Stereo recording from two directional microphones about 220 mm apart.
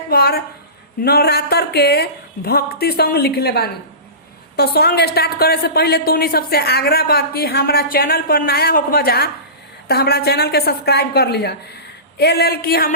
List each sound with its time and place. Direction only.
0.1 s a woman's voice: 45° left (ahead or behind)